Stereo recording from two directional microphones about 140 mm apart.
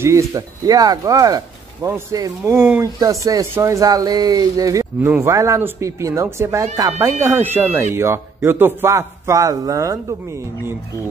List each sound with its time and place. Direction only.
0.0 s speech: 20° right (ahead or behind)